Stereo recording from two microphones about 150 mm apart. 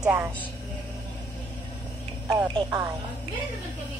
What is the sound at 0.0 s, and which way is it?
Speech, 10° right (ahead or behind).